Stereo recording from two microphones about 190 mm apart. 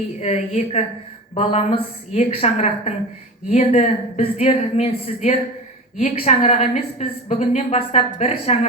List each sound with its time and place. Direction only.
0.2 s a woman's voice: 35° left (ahead or behind)